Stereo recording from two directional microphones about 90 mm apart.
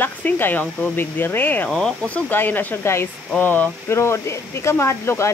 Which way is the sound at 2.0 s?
15° left (ahead or behind).